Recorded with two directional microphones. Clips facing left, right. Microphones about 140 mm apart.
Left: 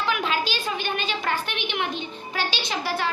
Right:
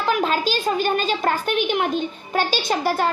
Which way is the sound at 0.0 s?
40° right (ahead or behind).